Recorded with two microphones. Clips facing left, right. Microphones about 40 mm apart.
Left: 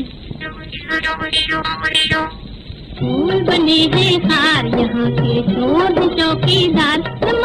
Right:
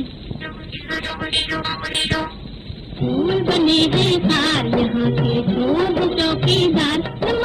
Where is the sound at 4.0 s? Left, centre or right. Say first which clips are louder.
Left 3 dB; left.